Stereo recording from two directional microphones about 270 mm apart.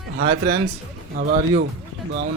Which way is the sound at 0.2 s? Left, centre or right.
Right.